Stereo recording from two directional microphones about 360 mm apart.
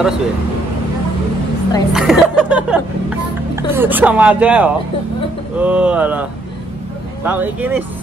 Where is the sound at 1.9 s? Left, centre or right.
Centre.